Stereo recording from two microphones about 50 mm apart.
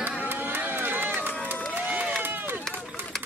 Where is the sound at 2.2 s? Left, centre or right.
Right.